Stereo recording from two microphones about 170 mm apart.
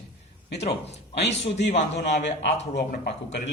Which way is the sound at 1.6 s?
90° left.